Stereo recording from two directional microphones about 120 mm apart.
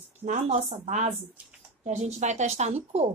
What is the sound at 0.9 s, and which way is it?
Speech, 90° right.